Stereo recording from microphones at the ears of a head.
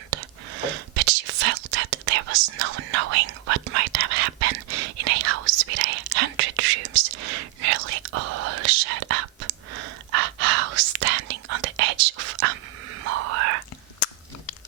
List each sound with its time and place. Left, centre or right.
0.1 s whispering: right